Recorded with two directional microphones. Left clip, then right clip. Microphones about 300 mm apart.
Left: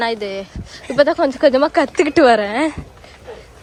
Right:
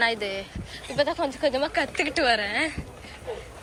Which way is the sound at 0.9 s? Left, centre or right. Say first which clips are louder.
Left 11 dB; left.